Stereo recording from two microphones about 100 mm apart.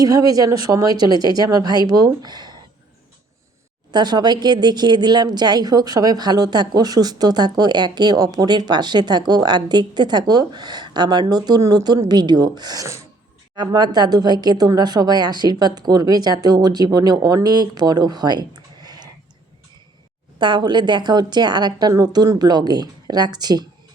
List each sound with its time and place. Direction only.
0.0 s a woman's voice: 40° right (ahead or behind)
3.9 s speech: 45° right (ahead or behind)
20.4 s speech: 50° right (ahead or behind)